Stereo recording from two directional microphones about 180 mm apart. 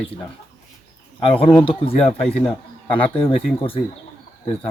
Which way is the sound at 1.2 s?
30° left (ahead or behind).